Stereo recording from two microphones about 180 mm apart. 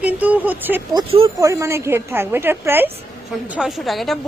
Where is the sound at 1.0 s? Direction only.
30° right (ahead or behind).